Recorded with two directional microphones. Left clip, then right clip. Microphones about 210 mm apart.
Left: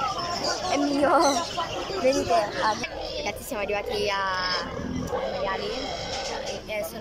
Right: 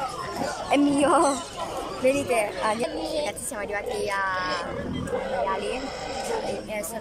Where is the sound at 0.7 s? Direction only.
5° right (ahead or behind).